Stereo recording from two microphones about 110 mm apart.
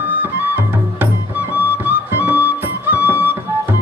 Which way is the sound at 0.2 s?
20° right (ahead or behind).